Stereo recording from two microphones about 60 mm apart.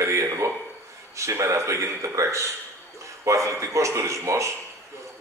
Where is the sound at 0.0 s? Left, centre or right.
Right.